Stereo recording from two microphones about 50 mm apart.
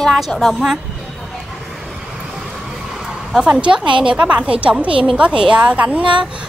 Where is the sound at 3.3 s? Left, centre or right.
Centre.